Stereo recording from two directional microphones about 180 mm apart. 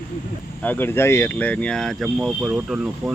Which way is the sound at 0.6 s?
10° left (ahead or behind).